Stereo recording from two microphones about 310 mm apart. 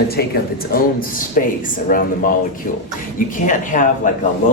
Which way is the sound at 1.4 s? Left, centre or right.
Left.